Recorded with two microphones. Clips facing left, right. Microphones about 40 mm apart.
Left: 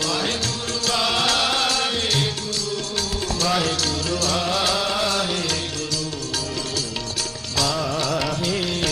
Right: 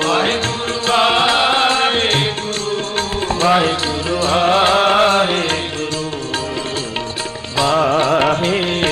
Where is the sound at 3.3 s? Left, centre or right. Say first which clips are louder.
Right 9 dB; right.